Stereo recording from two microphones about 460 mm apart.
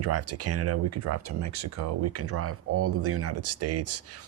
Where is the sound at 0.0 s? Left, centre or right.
Right.